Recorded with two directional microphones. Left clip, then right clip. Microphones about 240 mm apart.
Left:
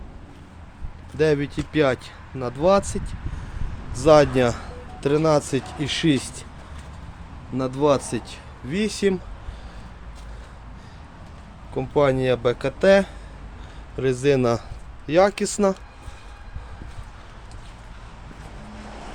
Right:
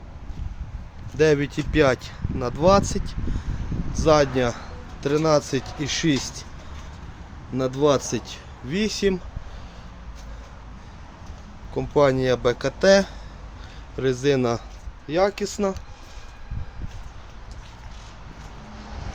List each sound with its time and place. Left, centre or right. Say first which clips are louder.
1.1 s speech: right 1 dB; centre
4.0 s a man's voice: left 3 dB; left
7.5 s speech: even; centre
11.7 s a man's voice: right 1 dB; centre
15.0 s speech: left 4 dB; left
18.8 s vehicle: left 2 dB; left